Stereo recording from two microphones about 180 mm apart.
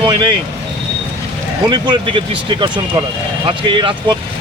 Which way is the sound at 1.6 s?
25° right (ahead or behind).